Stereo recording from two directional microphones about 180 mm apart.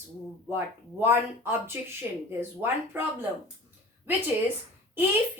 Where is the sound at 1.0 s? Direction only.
10° right (ahead or behind).